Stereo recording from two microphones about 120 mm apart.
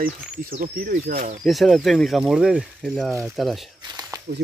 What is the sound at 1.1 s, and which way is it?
Speech, 90° right.